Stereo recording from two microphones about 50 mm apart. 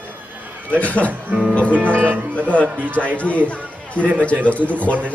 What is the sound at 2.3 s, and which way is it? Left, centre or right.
A man's voice, left.